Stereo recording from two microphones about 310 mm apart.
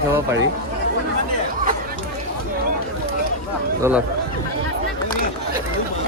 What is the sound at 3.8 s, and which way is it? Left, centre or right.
Speech, centre.